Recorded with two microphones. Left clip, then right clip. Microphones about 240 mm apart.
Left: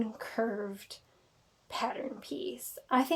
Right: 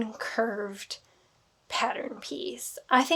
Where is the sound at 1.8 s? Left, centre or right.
Right.